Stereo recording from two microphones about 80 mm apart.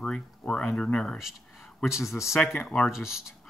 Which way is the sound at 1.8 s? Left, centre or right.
Centre.